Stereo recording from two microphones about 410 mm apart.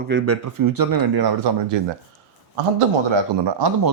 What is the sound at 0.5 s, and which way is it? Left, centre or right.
Speech, right.